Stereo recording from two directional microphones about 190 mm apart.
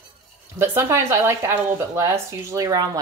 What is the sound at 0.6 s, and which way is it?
Speech, 15° right (ahead or behind).